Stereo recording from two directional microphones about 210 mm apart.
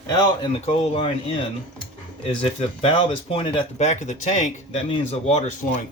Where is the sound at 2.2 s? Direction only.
30° left (ahead or behind).